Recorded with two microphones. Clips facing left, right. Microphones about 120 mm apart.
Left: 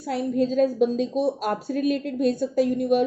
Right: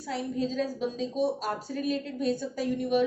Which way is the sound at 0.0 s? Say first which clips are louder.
Left 7 dB; 50° left (ahead or behind).